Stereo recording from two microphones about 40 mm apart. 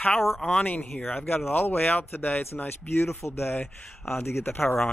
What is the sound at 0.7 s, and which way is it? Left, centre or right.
Speech, left.